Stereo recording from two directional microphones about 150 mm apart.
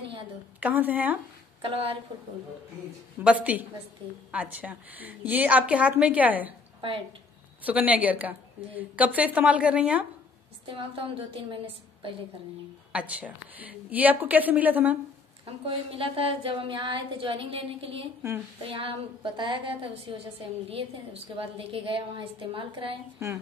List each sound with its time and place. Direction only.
0.6 s a woman's voice: 10° right (ahead or behind)
1.6 s a woman's voice: 40° right (ahead or behind)
3.3 s a woman's voice: 10° right (ahead or behind)
7.6 s a woman's voice: 10° right (ahead or behind)
10.6 s a woman's voice: 35° right (ahead or behind)
12.9 s a woman's voice: 10° right (ahead or behind)
15.4 s a woman's voice: 40° right (ahead or behind)
23.1 s speech: 20° right (ahead or behind)